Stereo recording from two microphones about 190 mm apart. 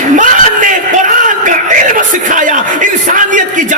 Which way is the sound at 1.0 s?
45° right (ahead or behind).